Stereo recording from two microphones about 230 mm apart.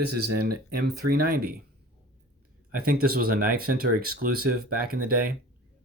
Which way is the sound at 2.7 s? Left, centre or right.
Right.